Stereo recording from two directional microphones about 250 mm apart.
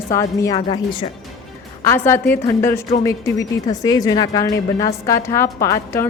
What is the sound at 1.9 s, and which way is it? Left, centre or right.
Speech, centre.